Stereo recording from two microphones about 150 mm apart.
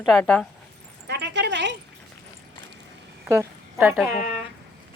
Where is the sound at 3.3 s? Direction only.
15° right (ahead or behind).